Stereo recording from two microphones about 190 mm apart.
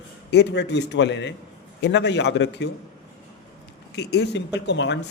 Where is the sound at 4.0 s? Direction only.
60° left (ahead or behind).